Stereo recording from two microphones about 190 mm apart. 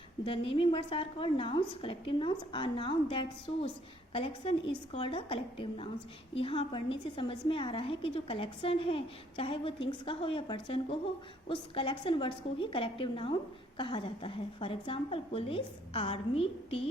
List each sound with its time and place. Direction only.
0.3 s a woman's voice: 30° left (ahead or behind)